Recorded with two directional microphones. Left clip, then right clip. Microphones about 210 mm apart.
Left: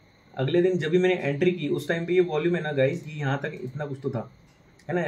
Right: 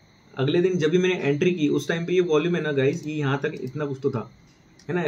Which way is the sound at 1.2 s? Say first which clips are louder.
Right 3 dB; 45° right (ahead or behind).